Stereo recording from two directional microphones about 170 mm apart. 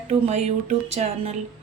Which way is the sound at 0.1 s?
40° right (ahead or behind).